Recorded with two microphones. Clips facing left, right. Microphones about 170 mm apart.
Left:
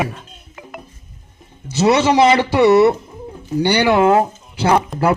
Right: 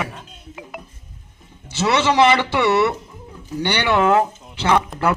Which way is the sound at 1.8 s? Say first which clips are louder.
Left 4 dB; 40° left (ahead or behind).